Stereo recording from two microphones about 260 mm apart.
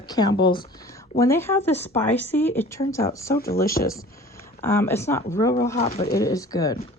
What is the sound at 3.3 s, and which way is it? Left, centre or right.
Speech, left.